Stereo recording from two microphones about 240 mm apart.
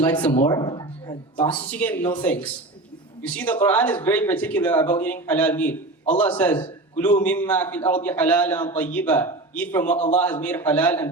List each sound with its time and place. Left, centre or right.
0.0 s speech: centre
0.4 s speech: centre
1.4 s speech: centre